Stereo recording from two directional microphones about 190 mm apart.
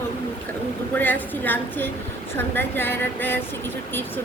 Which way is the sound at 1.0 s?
10° left (ahead or behind).